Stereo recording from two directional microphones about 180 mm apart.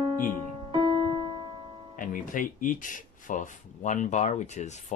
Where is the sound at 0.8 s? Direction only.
30° right (ahead or behind).